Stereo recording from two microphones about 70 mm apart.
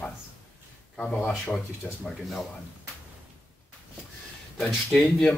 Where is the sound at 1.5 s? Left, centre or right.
Centre.